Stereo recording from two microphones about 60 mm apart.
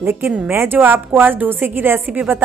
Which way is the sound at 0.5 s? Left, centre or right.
Right.